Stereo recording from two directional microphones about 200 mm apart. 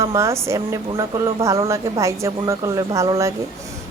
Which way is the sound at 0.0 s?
15° right (ahead or behind).